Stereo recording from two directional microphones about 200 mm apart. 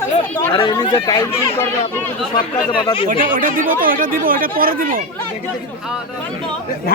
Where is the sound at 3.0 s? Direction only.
45° right (ahead or behind).